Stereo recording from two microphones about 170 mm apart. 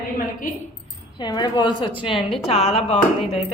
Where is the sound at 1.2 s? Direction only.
25° left (ahead or behind).